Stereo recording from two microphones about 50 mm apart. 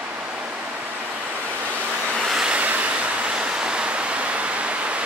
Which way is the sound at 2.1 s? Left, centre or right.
Centre.